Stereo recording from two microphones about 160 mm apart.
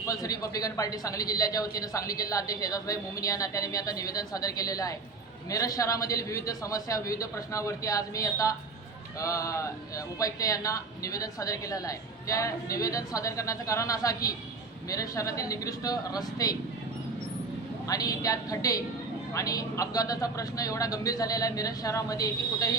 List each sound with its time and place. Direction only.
0.1 s speech: 20° left (ahead or behind)
17.8 s speech: 20° left (ahead or behind)